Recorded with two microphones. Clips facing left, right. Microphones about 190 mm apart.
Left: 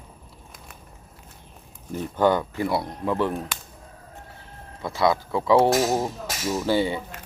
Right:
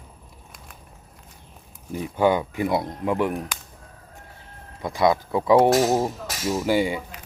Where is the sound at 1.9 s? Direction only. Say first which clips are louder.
Even; 10° right (ahead or behind).